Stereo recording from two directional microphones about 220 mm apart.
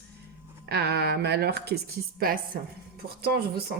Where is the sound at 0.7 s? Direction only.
50° right (ahead or behind).